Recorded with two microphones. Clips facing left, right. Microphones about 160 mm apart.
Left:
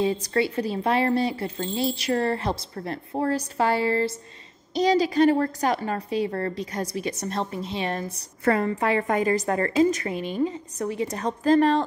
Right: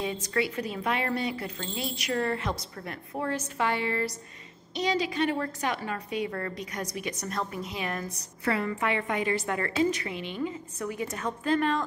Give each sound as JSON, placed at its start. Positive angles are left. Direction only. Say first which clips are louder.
{"t": 0.0, "sound": "speech", "louder": "left 6 dB", "side_deg": 35}
{"t": 8.5, "sound": "speech", "louder": "left 6 dB", "side_deg": 40}